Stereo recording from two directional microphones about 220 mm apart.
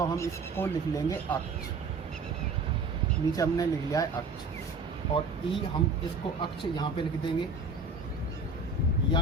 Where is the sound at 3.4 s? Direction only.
15° left (ahead or behind).